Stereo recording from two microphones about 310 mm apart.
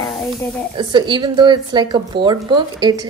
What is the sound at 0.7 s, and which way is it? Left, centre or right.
Speech, centre.